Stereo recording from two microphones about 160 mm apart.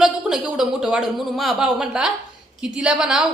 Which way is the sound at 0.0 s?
5° right (ahead or behind).